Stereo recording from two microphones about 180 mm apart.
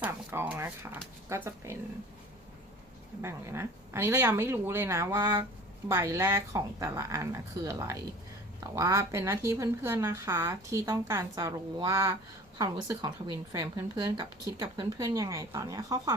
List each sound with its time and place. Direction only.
0.0 s speech: 10° right (ahead or behind)
3.2 s a woman's voice: 15° right (ahead or behind)